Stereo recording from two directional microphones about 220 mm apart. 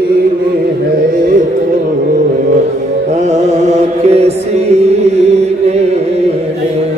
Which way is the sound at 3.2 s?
30° right (ahead or behind).